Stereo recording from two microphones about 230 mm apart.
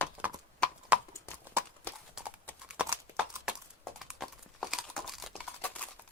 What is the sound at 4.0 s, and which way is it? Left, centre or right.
Typing, centre.